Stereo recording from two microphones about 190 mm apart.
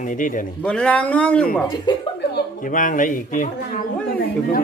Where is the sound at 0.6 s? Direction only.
5° left (ahead or behind).